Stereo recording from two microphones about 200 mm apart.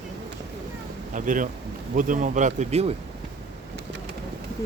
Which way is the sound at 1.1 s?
40° right (ahead or behind).